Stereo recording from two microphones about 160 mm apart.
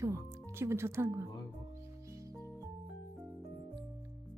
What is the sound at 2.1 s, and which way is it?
Music, 20° right (ahead or behind).